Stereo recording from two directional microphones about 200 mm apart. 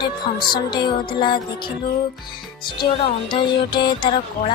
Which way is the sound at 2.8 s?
25° left (ahead or behind).